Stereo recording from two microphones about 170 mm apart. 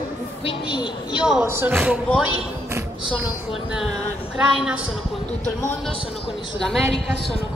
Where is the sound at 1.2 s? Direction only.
5° right (ahead or behind).